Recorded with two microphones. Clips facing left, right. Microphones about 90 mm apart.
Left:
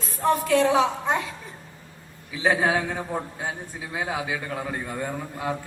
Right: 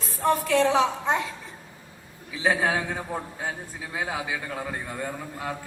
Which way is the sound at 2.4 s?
25° left (ahead or behind).